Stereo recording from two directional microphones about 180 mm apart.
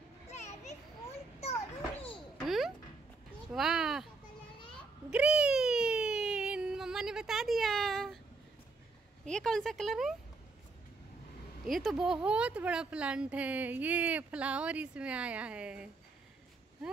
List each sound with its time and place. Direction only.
0.3 s children playing: 40° left (ahead or behind)
2.4 s music: centre (ahead or behind)
3.5 s speech: centre (ahead or behind)
5.1 s a sound: 5° right (ahead or behind)
9.3 s speech: 5° left (ahead or behind)
11.6 s speech: centre (ahead or behind)